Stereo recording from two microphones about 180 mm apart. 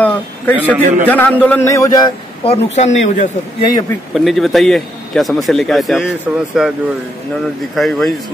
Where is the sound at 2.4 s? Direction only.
35° left (ahead or behind).